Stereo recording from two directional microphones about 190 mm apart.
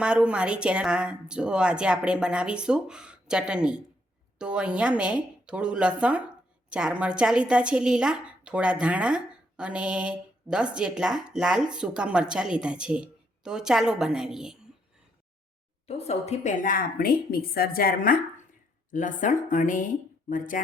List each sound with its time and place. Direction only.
0.0 s a woman's voice: 5° right (ahead or behind)
15.9 s a woman's voice: 35° left (ahead or behind)